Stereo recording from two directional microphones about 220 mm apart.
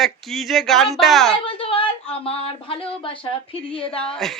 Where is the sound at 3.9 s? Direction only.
5° left (ahead or behind).